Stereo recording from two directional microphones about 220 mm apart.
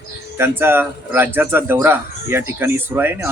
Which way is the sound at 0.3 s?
10° right (ahead or behind).